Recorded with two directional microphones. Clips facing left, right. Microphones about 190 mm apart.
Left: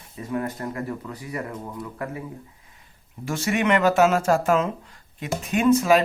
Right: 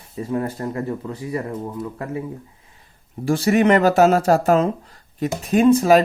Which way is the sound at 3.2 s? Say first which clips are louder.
Right 7 dB; 35° right (ahead or behind).